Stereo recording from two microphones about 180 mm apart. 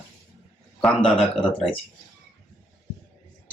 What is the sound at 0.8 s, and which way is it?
Speech, 5° left (ahead or behind).